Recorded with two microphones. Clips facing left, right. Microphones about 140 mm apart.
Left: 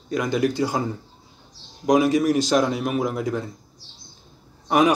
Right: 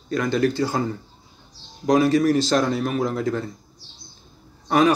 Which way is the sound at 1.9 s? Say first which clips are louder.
Right 1 dB; 15° left (ahead or behind).